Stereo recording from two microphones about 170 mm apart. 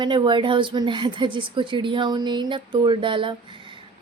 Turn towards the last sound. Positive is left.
turn(degrees=-30)  # may be behind; listen again after turning